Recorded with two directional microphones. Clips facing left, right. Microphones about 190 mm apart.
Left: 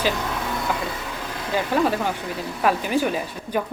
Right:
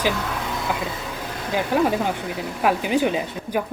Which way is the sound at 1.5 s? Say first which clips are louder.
Right 1 dB; 15° right (ahead or behind).